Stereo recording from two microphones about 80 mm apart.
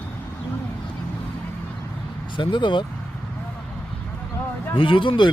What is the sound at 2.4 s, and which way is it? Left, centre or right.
Speech, left.